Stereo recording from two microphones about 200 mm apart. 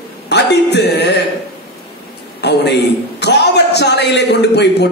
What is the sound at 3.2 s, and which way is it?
A man's voice, 55° left (ahead or behind).